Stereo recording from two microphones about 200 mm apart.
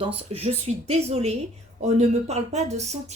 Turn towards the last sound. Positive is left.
turn(degrees=-35)  # may be behind; listen again after turning